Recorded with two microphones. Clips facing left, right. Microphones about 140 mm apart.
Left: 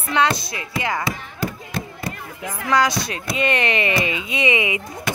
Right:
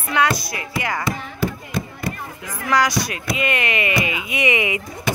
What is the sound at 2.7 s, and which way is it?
Speech, 25° left (ahead or behind).